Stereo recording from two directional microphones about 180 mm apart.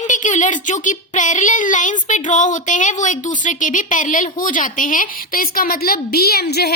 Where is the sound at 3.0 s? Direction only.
45° left (ahead or behind).